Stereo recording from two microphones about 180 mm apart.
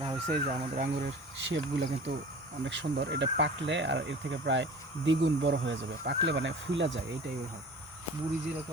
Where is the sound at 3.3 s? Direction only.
85° right.